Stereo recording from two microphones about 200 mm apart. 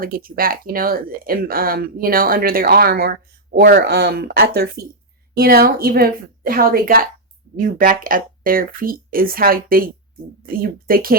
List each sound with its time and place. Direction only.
0.0 s speech: 45° right (ahead or behind)